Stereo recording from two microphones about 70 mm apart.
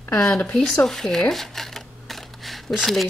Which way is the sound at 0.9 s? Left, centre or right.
Centre.